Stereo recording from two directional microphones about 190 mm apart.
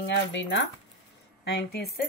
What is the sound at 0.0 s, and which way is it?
Speech, 65° left (ahead or behind).